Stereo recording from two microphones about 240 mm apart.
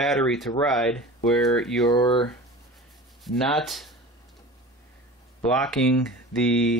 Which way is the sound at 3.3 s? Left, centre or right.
Centre.